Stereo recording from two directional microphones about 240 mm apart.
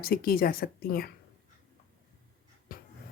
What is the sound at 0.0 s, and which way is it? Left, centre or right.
A woman's voice, left.